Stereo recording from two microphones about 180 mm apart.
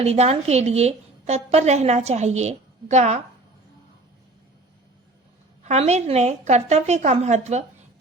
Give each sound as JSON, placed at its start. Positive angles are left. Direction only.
{"t": 0.0, "sound": "a woman's voice", "side_deg": -35}
{"t": 5.6, "sound": "a woman's voice", "side_deg": -35}